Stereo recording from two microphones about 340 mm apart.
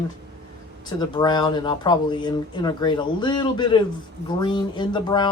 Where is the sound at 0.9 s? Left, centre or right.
Centre.